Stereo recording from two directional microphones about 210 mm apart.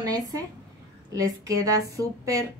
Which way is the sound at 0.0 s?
20° right (ahead or behind).